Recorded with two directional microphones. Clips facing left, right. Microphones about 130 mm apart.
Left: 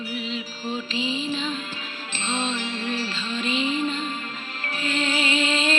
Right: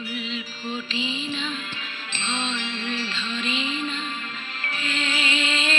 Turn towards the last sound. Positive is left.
turn(degrees=40)  # may be behind; listen again after turning